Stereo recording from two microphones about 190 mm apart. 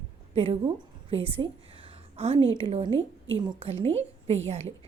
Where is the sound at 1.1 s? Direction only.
30° right (ahead or behind).